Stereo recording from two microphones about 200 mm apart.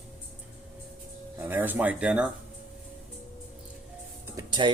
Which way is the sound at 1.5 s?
10° right (ahead or behind).